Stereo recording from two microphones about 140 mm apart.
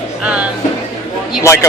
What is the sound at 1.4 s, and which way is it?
Speech, 20° left (ahead or behind).